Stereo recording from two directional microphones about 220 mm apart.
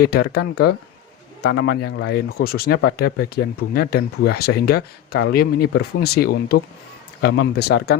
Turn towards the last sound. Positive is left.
turn(degrees=45)  # may be behind; listen again after turning